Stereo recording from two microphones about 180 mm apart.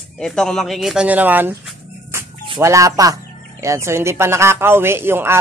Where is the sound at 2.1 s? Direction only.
15° right (ahead or behind).